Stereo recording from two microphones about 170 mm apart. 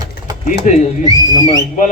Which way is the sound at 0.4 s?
45° left (ahead or behind).